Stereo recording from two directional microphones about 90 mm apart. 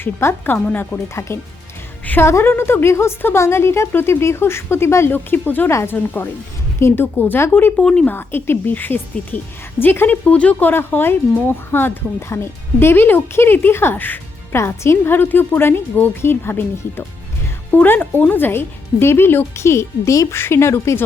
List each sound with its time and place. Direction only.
0.0 s a woman's voice: 25° left (ahead or behind)
1.0 s a woman's voice: 30° left (ahead or behind)
7.8 s speech: 10° left (ahead or behind)
8.0 s a woman's voice: 25° left (ahead or behind)
17.7 s a woman's voice: 20° left (ahead or behind)